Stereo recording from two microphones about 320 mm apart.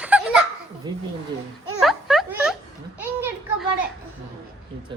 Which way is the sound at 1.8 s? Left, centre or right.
Centre.